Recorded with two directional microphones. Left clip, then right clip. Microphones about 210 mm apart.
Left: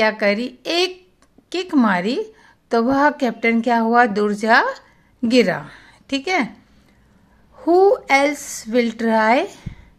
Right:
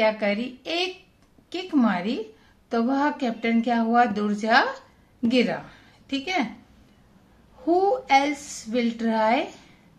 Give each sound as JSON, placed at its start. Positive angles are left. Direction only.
{"t": 0.0, "sound": "a woman's voice", "side_deg": 50}
{"t": 7.6, "sound": "speech", "side_deg": 45}